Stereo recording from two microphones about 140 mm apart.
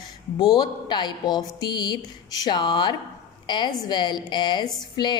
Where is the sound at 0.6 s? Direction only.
30° left (ahead or behind).